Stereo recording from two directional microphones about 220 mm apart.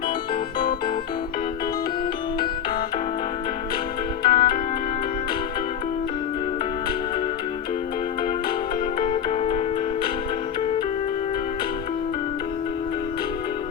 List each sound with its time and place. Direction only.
4.2 s music: 45° left (ahead or behind)
9.0 s music: 30° left (ahead or behind)